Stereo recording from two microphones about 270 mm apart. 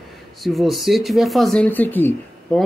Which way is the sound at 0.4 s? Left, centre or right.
Centre.